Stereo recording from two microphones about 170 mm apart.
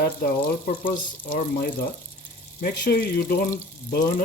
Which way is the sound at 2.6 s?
65° left (ahead or behind).